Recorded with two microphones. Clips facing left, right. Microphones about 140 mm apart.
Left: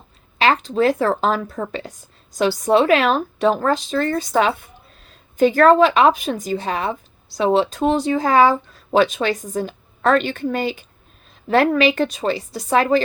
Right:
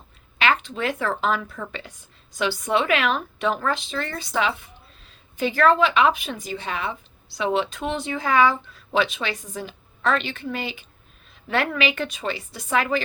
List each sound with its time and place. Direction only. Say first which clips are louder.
0.3 s speech: left 6 dB; 35° left (ahead or behind)